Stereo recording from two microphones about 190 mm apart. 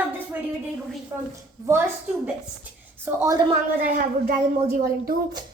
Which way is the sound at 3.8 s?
50° right (ahead or behind).